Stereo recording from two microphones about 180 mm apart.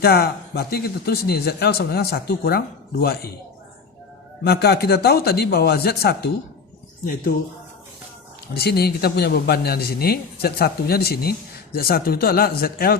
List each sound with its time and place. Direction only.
0.0 s speech: 60° left (ahead or behind)
4.4 s speech: 60° left (ahead or behind)
8.5 s speech: 60° left (ahead or behind)